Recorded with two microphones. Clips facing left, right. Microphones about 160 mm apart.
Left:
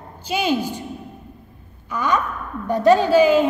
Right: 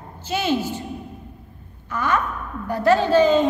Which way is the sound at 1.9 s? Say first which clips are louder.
Left 1 dB; 15° left (ahead or behind).